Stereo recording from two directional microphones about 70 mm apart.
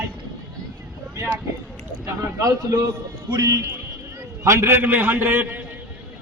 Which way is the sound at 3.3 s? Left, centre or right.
Right.